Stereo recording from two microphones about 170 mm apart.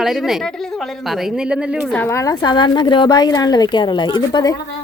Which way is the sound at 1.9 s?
15° left (ahead or behind).